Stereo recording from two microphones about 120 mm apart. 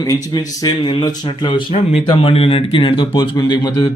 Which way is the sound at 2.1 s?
50° left (ahead or behind).